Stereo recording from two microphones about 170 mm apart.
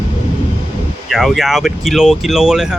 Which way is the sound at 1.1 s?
Centre (ahead or behind).